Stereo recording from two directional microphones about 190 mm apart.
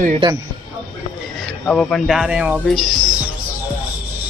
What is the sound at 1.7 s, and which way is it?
Speech, 5° left (ahead or behind).